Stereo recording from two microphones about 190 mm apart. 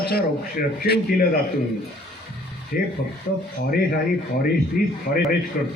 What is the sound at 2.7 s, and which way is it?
Speech, 50° left (ahead or behind).